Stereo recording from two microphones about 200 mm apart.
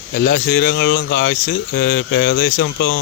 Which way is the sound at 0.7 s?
75° left (ahead or behind).